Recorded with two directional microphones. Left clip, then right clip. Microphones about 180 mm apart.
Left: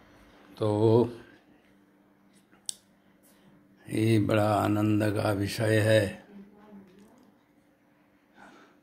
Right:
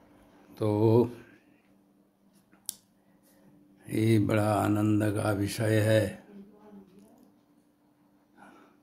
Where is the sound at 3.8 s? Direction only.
10° right (ahead or behind).